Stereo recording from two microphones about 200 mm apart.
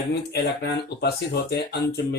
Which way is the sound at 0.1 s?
55° left (ahead or behind).